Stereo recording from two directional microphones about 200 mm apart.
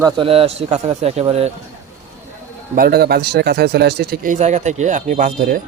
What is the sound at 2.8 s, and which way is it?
Speech, 50° right (ahead or behind).